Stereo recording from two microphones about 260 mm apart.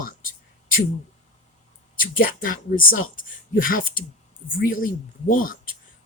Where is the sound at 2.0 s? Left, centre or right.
Left.